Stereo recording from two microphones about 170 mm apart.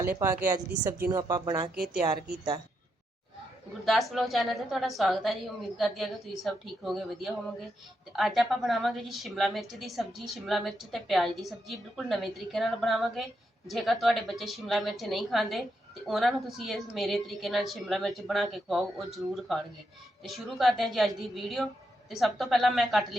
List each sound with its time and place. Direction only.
0.2 s speech: 15° right (ahead or behind)
3.8 s a woman's voice: centre (ahead or behind)